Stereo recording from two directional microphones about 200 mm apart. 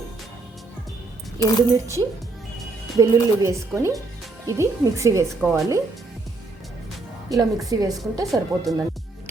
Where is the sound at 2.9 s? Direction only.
15° right (ahead or behind).